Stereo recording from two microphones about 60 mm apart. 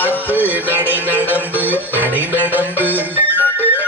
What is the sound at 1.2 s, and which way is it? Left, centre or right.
Music, left.